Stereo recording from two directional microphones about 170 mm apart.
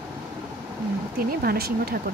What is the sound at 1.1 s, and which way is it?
Speech, 65° right (ahead or behind).